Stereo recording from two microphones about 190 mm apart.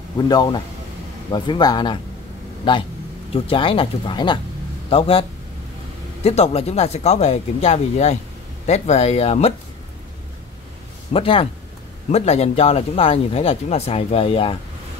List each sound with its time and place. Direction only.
0.3 s speech: 25° left (ahead or behind)
3.3 s a man's voice: 30° left (ahead or behind)
6.2 s a man's voice: 35° left (ahead or behind)
11.1 s a man's voice: 30° left (ahead or behind)